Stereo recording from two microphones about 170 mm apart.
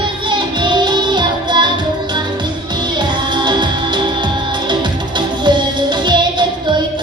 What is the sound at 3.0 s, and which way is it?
Music, 25° right (ahead or behind).